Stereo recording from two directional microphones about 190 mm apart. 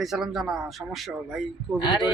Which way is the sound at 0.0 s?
Centre (ahead or behind).